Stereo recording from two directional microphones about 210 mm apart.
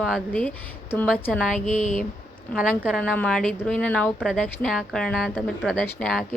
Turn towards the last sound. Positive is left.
turn(degrees=5)  # may be behind; listen again after turning